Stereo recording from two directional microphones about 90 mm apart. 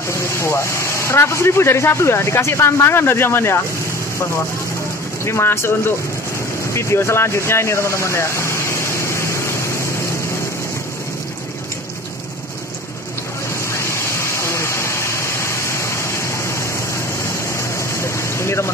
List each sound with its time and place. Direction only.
0.1 s speech: 30° left (ahead or behind)
5.2 s speech: 30° left (ahead or behind)
6.7 s vehicle: 30° left (ahead or behind)
13.7 s a sound: 30° left (ahead or behind)